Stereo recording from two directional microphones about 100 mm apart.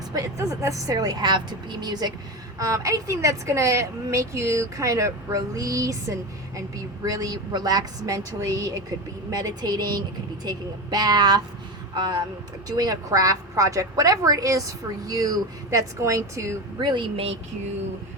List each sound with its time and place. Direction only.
0.1 s a woman's voice: 30° right (ahead or behind)
16.7 s a woman's voice: 50° right (ahead or behind)